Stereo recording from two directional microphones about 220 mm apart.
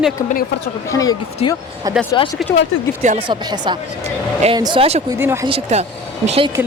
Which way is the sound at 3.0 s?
30° right (ahead or behind).